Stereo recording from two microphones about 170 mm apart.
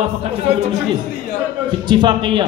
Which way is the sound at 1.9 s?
25° right (ahead or behind).